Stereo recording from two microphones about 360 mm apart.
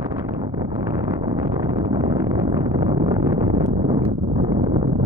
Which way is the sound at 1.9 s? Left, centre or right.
Centre.